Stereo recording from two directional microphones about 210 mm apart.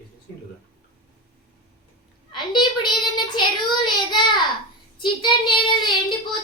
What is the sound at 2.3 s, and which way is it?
Child singing, 20° left (ahead or behind).